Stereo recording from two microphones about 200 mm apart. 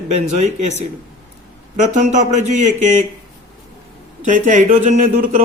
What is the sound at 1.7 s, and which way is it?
Speech, 35° right (ahead or behind).